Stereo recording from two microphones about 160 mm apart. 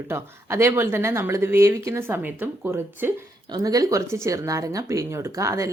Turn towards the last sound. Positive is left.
turn(degrees=-20)  # may be behind; listen again after turning